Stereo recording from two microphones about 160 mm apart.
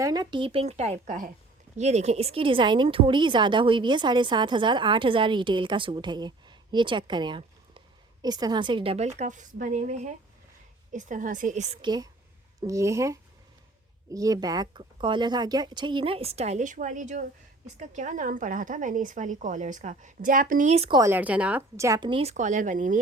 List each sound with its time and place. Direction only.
0.0 s a woman's voice: 25° right (ahead or behind); by 11.8 s 45° right (ahead or behind)
11.8 s a woman's voice: 25° right (ahead or behind); by 20.9 s 45° right (ahead or behind)
20.9 s speech: 15° right (ahead or behind)
21.8 s a woman's voice: 20° right (ahead or behind); by 23.0 s 55° right (ahead or behind)